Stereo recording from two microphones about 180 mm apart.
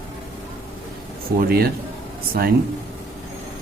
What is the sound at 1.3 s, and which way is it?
Speech, 60° right (ahead or behind).